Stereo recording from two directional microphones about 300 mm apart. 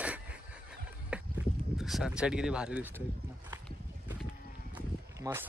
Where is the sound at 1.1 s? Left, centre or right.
Centre.